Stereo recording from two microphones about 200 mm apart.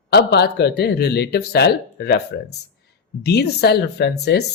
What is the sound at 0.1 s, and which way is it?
Speech, 55° left (ahead or behind).